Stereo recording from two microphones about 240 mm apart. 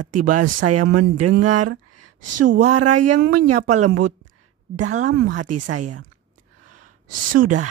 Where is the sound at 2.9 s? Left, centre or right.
Right.